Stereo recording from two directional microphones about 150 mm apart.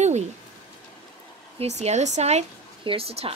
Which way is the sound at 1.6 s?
45° right (ahead or behind).